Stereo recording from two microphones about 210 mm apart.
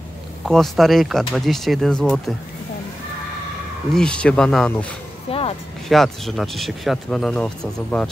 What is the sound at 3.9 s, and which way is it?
Speech, 5° left (ahead or behind).